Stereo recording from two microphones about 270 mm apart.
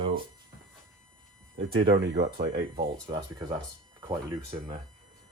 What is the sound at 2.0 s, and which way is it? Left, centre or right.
Speech, right.